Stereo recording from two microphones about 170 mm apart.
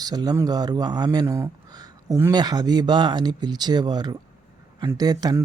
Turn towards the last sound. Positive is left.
turn(degrees=-20)  # may be behind; listen again after turning